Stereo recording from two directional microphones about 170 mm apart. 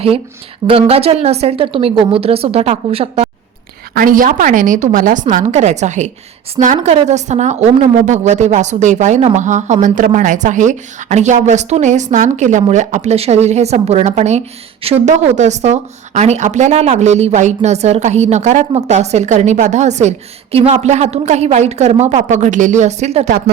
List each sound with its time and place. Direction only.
0.7 s a woman's voice: 35° right (ahead or behind)
3.9 s a woman's voice: 55° right (ahead or behind)